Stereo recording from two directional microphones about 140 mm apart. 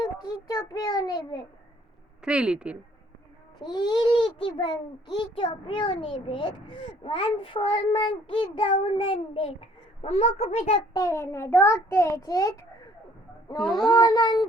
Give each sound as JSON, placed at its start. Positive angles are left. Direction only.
{"t": 0.0, "sound": "a child's voice", "side_deg": 30}
{"t": 2.2, "sound": "a woman's voice", "side_deg": -5}
{"t": 3.6, "sound": "a child's voice", "side_deg": 30}
{"t": 10.9, "sound": "a child's voice", "side_deg": 20}
{"t": 13.6, "sound": "speech", "side_deg": 0}
{"t": 13.9, "sound": "a child's voice", "side_deg": 30}